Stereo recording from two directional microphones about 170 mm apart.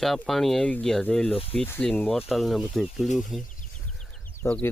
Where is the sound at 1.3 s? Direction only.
35° left (ahead or behind).